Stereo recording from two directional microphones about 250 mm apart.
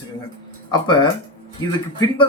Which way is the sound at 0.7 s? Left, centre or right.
Centre.